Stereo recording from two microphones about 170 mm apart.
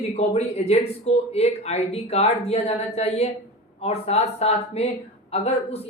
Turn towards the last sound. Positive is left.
turn(degrees=35)  # may be behind; listen again after turning